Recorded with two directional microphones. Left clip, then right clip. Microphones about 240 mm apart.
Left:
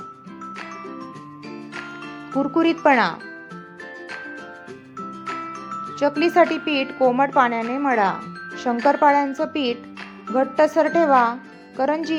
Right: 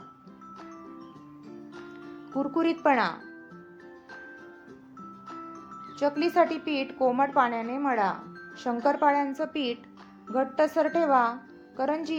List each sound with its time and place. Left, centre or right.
0.5 s music: left
2.4 s a woman's voice: left
5.2 s music: left
6.0 s a woman's voice: left